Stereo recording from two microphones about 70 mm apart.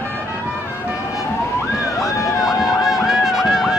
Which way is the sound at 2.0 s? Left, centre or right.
Left.